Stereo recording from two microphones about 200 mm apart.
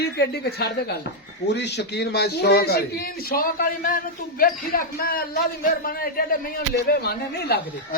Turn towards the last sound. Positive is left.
turn(degrees=50)  # may be behind; listen again after turning